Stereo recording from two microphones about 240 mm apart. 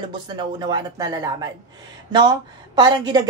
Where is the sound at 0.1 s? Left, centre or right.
Centre.